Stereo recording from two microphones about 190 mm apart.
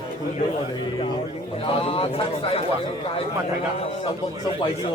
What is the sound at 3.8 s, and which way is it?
Speech, 30° left (ahead or behind).